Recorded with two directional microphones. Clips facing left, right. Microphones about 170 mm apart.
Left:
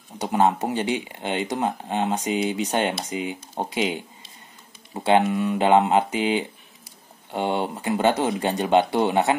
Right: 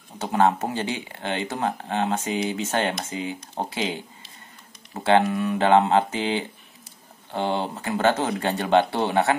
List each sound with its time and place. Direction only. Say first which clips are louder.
0.2 s speech: even; 15° left (ahead or behind)
5.0 s speech: even; 20° left (ahead or behind)